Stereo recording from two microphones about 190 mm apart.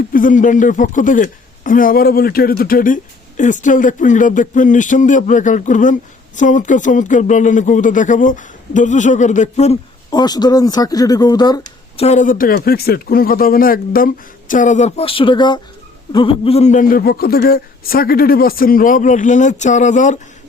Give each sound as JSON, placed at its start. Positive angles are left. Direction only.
{"t": 0.1, "sound": "speech", "side_deg": 45}
{"t": 10.1, "sound": "speech", "side_deg": 20}
{"t": 12.0, "sound": "a man's voice", "side_deg": 40}